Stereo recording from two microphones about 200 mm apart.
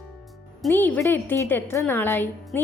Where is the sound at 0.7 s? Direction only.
10° left (ahead or behind).